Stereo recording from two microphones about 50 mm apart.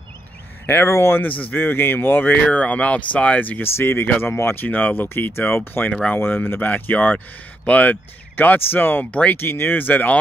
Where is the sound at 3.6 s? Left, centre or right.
Left.